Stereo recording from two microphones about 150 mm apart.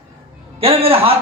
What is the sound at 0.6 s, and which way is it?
Speech, 40° right (ahead or behind).